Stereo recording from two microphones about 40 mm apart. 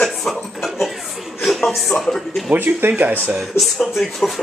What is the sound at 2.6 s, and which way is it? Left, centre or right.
Speech, right.